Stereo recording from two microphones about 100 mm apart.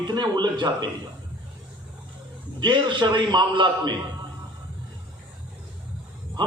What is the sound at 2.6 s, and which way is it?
A man's voice, 50° right (ahead or behind).